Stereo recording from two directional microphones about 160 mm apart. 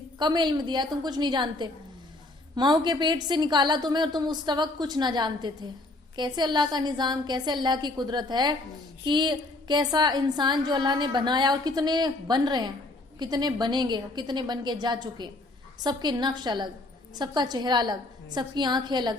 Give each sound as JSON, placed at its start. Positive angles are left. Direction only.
{"t": 0.2, "sound": "a woman's voice", "side_deg": -30}